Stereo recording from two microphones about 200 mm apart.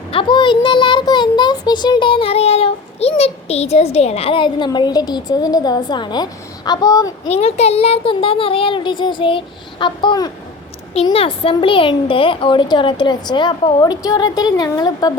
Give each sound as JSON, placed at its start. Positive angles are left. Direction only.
{"t": 0.1, "sound": "speech", "side_deg": 25}
{"t": 7.3, "sound": "speech", "side_deg": 30}